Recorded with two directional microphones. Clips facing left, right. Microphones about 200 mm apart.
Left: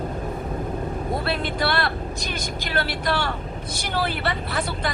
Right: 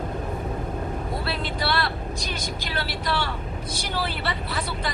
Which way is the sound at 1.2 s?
50° left (ahead or behind).